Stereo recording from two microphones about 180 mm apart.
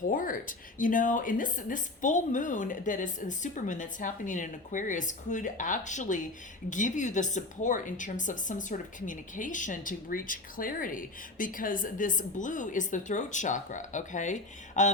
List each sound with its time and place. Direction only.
0.1 s a woman's voice: 50° left (ahead or behind)